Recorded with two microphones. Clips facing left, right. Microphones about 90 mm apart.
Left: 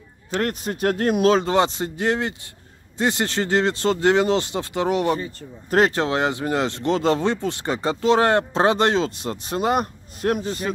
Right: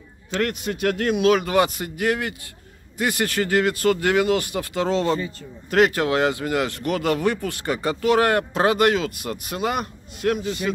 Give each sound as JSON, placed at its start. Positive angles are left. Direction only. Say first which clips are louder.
{"t": 0.4, "sound": "speech", "louder": "even", "side_deg": 35}
{"t": 5.2, "sound": "speech", "louder": "right 1 dB", "side_deg": 30}